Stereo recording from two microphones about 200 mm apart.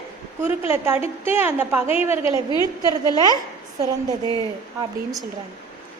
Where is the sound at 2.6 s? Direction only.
20° right (ahead or behind).